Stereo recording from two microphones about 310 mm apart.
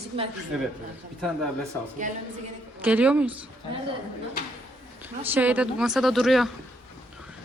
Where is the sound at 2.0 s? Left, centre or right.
Right.